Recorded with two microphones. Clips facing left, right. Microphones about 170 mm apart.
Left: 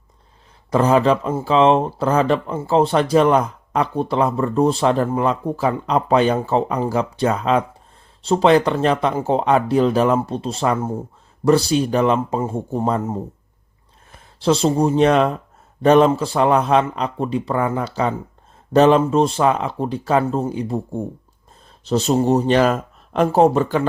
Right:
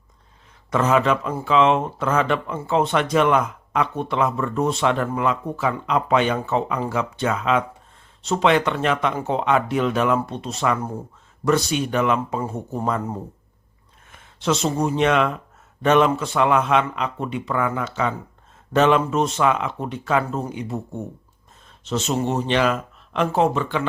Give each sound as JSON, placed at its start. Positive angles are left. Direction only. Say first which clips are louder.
{"t": 0.7, "sound": "speech", "louder": "left 4 dB", "side_deg": 35}
{"t": 14.1, "sound": "speech", "louder": "left 5 dB", "side_deg": 35}